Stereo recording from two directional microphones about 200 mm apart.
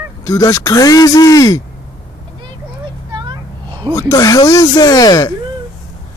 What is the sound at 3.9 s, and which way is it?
Speech, 15° left (ahead or behind).